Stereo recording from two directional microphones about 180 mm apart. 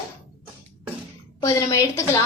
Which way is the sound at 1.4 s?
20° left (ahead or behind).